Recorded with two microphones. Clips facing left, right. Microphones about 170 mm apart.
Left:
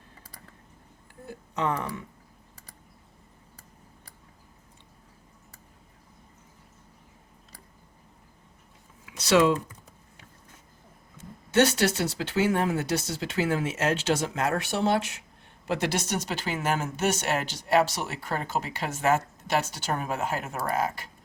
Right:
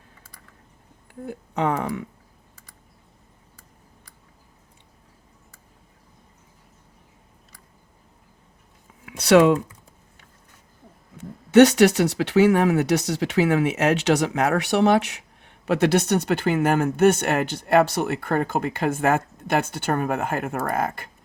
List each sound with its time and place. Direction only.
1.2 s speech: 60° right (ahead or behind)
9.0 s computer keyboard: 60° right (ahead or behind)
11.2 s speech: 65° right (ahead or behind)